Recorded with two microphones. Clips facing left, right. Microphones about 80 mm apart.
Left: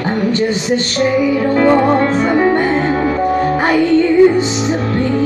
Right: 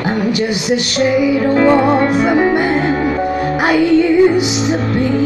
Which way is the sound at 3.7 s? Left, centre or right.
Centre.